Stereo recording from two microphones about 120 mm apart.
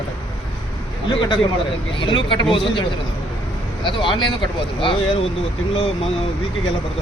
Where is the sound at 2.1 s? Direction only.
40° left (ahead or behind).